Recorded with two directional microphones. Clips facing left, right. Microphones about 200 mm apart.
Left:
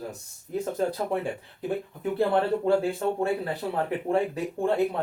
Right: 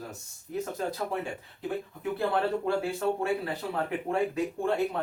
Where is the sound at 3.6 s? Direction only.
30° left (ahead or behind).